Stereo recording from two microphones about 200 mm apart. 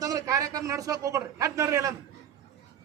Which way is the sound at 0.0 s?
15° right (ahead or behind).